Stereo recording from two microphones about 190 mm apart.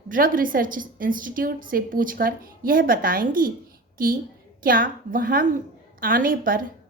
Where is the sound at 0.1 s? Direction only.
45° right (ahead or behind).